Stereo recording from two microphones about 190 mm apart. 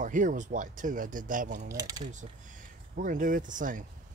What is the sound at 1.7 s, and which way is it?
Speech, 20° right (ahead or behind).